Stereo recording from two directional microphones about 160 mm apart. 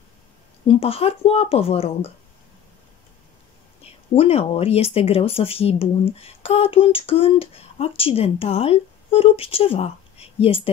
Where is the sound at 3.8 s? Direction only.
40° left (ahead or behind).